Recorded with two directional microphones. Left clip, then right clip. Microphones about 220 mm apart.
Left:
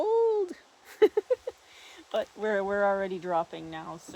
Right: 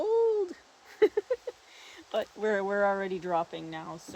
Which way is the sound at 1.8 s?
20° left (ahead or behind).